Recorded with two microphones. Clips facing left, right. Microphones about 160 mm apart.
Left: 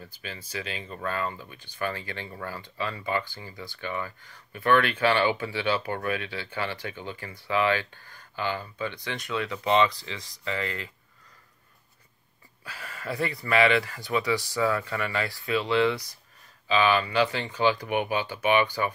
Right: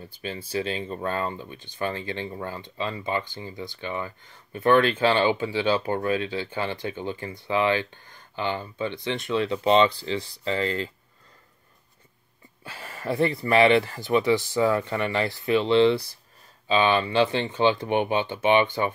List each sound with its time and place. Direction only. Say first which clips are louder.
0.0 s speech: right 6 dB; 30° right (ahead or behind)
12.6 s speech: right 5 dB; 25° right (ahead or behind)